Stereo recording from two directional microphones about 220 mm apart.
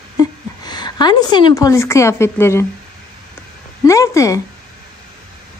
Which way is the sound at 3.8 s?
15° left (ahead or behind).